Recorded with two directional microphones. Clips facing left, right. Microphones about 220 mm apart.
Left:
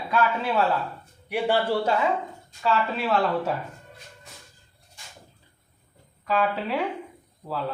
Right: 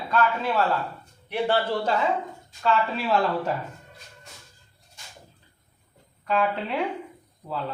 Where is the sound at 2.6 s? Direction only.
Centre (ahead or behind).